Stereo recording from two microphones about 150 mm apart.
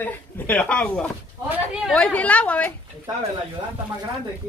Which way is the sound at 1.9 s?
10° left (ahead or behind).